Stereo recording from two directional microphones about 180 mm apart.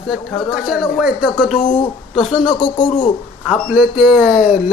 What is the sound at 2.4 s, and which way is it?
Speech, 25° left (ahead or behind).